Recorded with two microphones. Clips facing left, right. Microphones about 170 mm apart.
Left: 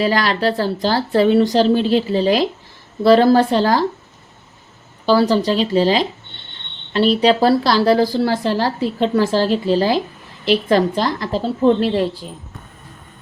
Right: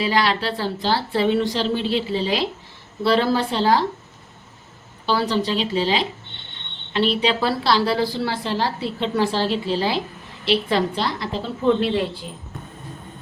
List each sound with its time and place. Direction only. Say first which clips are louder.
0.0 s a woman's voice: left 4 dB; 45° left (ahead or behind)
5.0 s a woman's voice: left 7 dB; 40° left (ahead or behind)